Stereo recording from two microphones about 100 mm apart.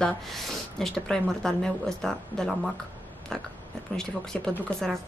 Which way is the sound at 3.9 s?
5° left (ahead or behind).